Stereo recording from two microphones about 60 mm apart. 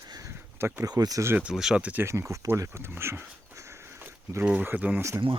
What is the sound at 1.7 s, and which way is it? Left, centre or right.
Speech, right.